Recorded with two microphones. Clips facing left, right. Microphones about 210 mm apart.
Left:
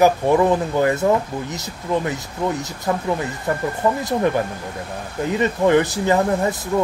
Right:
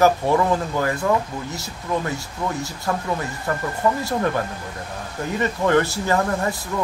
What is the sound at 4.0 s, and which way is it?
Speech, 20° left (ahead or behind).